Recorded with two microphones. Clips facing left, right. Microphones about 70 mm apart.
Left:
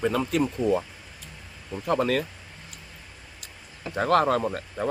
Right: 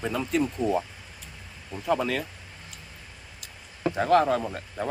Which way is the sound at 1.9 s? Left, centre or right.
Left.